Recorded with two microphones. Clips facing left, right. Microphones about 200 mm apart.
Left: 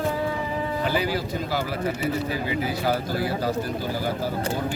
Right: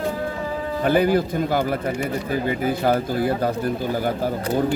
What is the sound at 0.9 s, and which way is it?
Speech, 50° right (ahead or behind).